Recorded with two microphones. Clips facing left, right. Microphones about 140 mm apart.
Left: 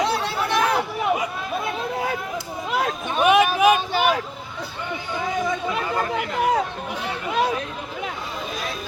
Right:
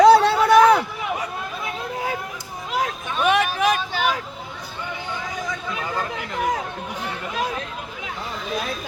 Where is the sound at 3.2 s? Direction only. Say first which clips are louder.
Left 3 dB; 10° left (ahead or behind).